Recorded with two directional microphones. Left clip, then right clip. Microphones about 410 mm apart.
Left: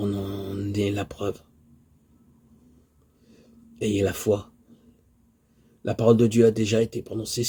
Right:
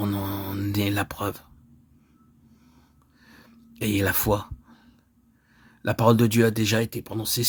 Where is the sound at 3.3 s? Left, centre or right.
Right.